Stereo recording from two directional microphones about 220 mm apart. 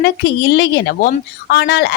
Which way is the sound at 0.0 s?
45° left (ahead or behind).